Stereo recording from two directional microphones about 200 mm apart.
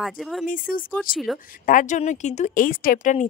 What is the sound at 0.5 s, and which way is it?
Speech, 45° left (ahead or behind).